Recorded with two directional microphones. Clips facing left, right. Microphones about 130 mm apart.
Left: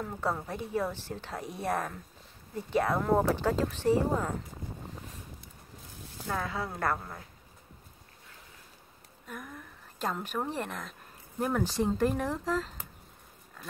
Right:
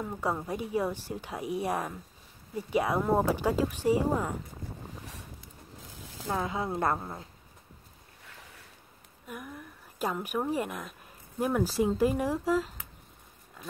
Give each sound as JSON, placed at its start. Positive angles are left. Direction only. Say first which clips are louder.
{"t": 0.0, "sound": "a woman's voice", "louder": "right 1 dB", "side_deg": -10}
{"t": 6.2, "sound": "a woman's voice", "louder": "right 3 dB", "side_deg": -20}
{"t": 9.3, "sound": "a woman's voice", "louder": "right 2 dB", "side_deg": -10}